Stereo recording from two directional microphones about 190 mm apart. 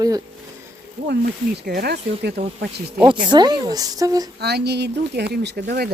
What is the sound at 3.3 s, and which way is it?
Speech, 25° right (ahead or behind).